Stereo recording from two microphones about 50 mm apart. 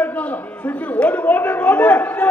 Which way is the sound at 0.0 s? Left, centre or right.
Left.